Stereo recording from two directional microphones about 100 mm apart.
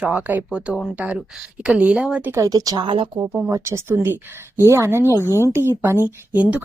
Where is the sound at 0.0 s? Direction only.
15° right (ahead or behind).